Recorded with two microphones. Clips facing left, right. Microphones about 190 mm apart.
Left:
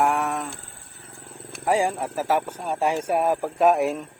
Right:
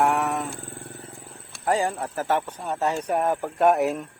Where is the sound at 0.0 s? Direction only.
Centre (ahead or behind).